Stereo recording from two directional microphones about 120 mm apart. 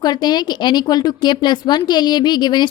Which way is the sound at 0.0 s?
35° left (ahead or behind).